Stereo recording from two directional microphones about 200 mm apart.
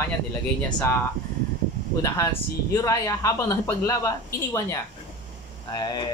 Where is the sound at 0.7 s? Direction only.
20° left (ahead or behind).